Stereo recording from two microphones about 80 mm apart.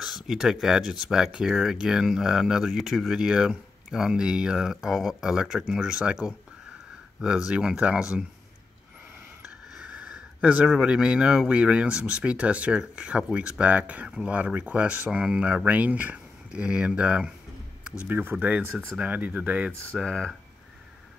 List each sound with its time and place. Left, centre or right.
0.0 s speech: centre
9.8 s speech: centre
20.0 s speech: centre